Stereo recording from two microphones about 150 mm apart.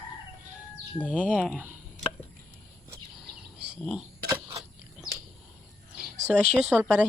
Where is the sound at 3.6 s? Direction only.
5° right (ahead or behind).